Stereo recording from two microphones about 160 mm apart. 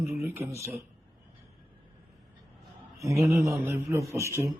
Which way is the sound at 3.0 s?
20° right (ahead or behind).